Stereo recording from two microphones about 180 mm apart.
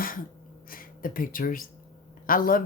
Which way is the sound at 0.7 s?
50° left (ahead or behind).